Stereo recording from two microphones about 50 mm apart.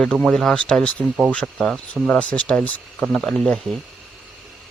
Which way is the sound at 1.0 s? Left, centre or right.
Right.